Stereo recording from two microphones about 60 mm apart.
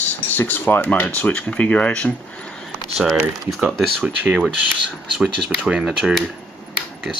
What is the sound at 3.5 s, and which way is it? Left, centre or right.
Speech, centre.